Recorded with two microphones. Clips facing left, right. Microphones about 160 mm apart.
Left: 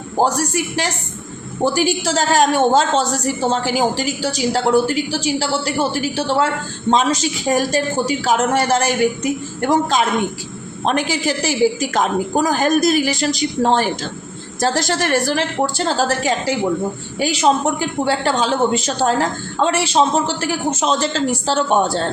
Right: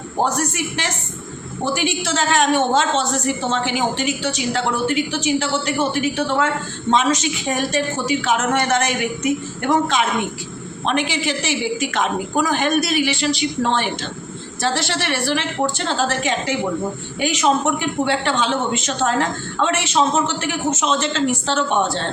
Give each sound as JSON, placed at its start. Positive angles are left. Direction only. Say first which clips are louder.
{"t": 0.2, "sound": "a woman's voice", "louder": "left 3 dB", "side_deg": 35}